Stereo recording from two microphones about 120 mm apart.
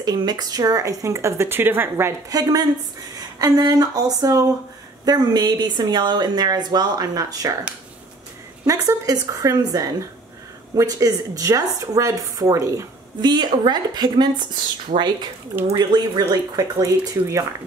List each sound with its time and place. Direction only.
0.0 s speech: 35° right (ahead or behind); by 2.1 s 20° right (ahead or behind)
2.2 s a woman's voice: 30° right (ahead or behind)
8.6 s speech: 30° right (ahead or behind)
13.2 s a woman's voice: 40° right (ahead or behind)
14.9 s speech: 90° right
15.7 s speech: 35° right (ahead or behind)